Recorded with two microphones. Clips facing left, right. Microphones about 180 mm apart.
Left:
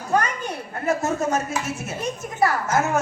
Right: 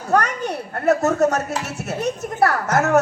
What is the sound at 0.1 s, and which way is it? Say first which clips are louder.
A child's voice: right 3 dB; 70° right (ahead or behind).